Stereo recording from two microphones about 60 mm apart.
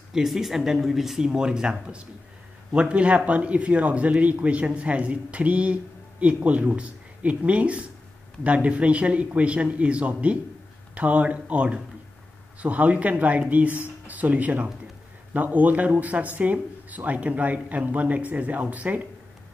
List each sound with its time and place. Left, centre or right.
0.1 s speech: centre; by 19.0 s right